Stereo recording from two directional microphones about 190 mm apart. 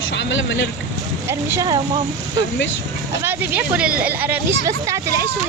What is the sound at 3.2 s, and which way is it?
Speech, 10° right (ahead or behind).